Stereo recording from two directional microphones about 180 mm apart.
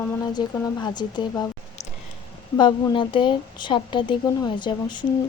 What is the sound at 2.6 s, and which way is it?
Speech, 25° left (ahead or behind).